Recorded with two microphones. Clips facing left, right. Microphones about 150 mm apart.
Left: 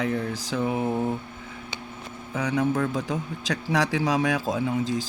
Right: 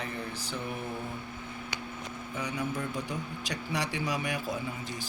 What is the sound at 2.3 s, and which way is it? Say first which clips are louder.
Speech: left 10 dB; 90° left.